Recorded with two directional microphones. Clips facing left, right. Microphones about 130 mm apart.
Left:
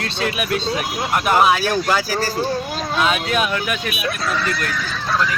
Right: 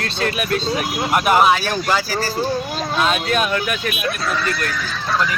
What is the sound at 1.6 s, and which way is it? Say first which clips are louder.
Speech: left 1 dB; 5° left (ahead or behind).